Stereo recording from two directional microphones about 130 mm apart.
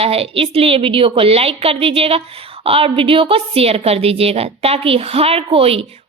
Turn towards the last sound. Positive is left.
turn(degrees=-45)  # may be behind; listen again after turning